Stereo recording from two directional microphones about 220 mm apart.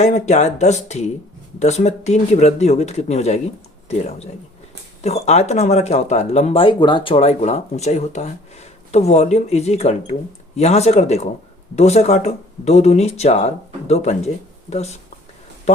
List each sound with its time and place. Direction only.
0.0 s speech: 30° left (ahead or behind)